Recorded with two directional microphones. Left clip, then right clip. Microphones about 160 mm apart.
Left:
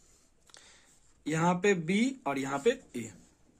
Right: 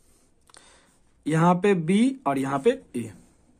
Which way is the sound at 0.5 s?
25° right (ahead or behind).